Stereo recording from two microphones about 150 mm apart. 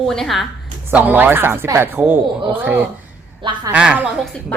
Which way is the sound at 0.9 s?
10° right (ahead or behind).